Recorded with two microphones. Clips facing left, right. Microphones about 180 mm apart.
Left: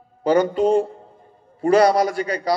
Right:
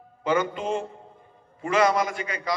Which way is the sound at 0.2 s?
35° left (ahead or behind).